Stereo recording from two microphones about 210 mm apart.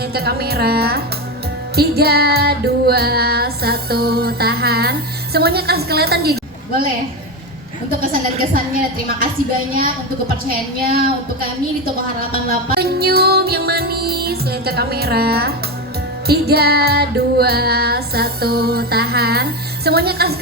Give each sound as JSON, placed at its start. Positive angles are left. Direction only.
{"t": 0.1, "sound": "music", "side_deg": -50}
{"t": 7.9, "sound": "music", "side_deg": -45}
{"t": 12.3, "sound": "music", "side_deg": -45}